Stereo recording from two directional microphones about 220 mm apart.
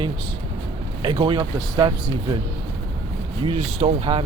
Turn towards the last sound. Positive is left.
turn(degrees=-25)  # may be behind; listen again after turning